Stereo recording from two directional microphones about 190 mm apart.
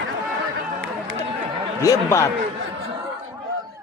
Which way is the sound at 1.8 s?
15° left (ahead or behind).